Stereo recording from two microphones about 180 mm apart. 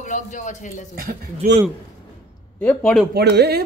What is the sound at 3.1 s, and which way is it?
Speech, 65° right (ahead or behind).